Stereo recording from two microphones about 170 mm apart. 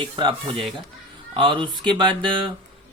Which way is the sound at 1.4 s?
30° right (ahead or behind).